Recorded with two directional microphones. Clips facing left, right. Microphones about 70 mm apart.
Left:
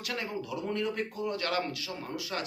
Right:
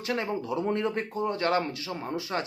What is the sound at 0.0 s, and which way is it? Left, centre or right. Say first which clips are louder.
Speech: right 6 dB; right.